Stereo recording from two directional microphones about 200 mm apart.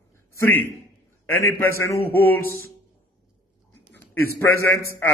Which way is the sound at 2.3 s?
50° right (ahead or behind).